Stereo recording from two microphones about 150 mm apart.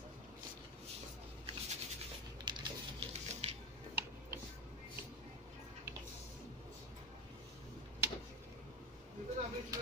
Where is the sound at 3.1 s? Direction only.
45° right (ahead or behind).